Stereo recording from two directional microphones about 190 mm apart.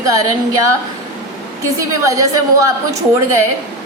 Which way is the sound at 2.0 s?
15° right (ahead or behind).